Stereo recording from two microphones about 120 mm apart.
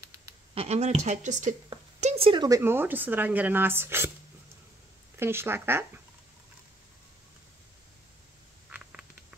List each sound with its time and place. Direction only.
0.6 s speech: 65° right (ahead or behind); by 1.5 s 90° right
2.0 s a sound: 60° right (ahead or behind)
2.4 s a woman's voice: 25° right (ahead or behind)
5.2 s speech: 20° right (ahead or behind)
8.6 s patter: 10° right (ahead or behind)